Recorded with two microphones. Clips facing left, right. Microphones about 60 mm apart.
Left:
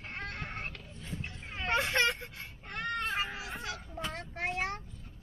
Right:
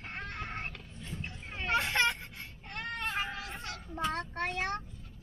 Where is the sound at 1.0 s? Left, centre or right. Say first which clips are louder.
Even; centre.